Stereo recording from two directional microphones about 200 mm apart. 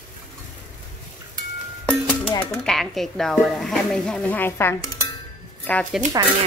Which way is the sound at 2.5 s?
5° left (ahead or behind).